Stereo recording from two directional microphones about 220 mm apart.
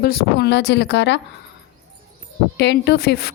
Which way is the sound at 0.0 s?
45° left (ahead or behind).